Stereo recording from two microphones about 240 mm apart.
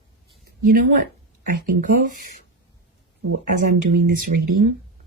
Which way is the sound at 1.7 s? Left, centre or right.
Right.